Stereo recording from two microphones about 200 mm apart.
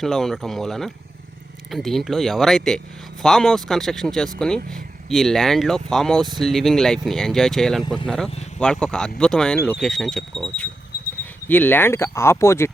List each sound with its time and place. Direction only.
0.0 s speech: centre (ahead or behind)